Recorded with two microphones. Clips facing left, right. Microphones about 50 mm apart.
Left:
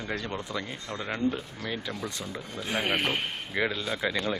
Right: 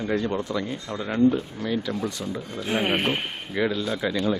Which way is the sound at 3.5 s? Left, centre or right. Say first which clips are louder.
Right 5 dB; centre.